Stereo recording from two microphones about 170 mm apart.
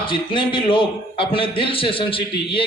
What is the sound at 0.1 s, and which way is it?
A man's voice, 30° left (ahead or behind).